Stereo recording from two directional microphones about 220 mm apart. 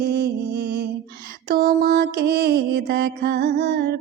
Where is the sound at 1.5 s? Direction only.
45° right (ahead or behind).